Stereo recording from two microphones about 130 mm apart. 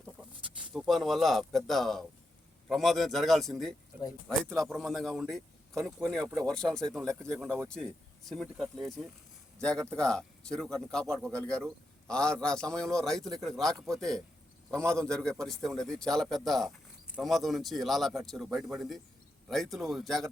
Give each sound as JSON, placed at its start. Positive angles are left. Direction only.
{"t": 0.6, "sound": "a man's voice", "side_deg": -5}